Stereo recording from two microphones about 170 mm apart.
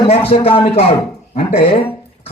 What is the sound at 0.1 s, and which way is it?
Speech, 35° left (ahead or behind).